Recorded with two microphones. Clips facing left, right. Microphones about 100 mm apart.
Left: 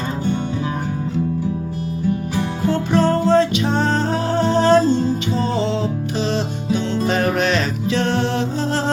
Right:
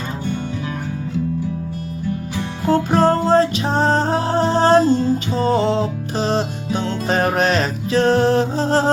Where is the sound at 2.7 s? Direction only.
40° right (ahead or behind).